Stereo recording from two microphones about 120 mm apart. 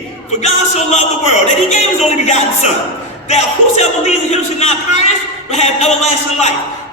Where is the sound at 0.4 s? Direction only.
70° left (ahead or behind).